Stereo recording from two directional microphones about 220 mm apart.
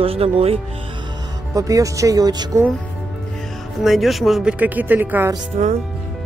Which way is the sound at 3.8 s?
Centre (ahead or behind).